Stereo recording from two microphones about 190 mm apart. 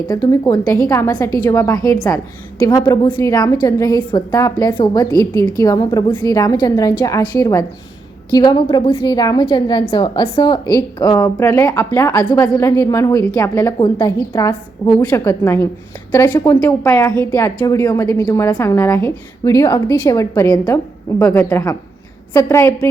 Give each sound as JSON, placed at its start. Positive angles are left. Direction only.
{"t": 0.1, "sound": "a woman's voice", "side_deg": 20}